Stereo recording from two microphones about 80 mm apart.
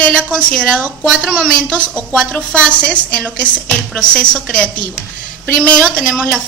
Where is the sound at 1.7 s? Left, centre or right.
Centre.